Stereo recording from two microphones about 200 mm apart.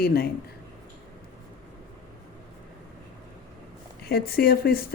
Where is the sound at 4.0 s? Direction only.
50° left (ahead or behind).